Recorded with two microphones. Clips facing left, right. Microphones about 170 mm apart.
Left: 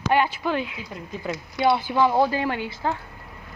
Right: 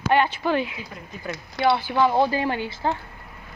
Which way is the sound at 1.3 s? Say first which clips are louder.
Even; 20° left (ahead or behind).